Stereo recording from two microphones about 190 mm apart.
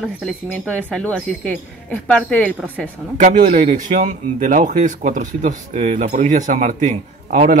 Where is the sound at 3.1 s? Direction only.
35° right (ahead or behind).